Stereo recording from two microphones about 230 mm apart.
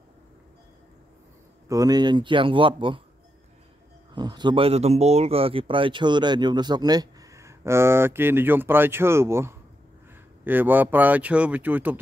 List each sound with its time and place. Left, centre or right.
1.7 s speech: centre
4.1 s speech: centre